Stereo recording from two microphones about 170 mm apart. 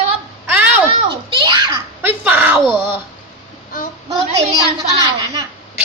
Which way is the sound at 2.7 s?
25° left (ahead or behind).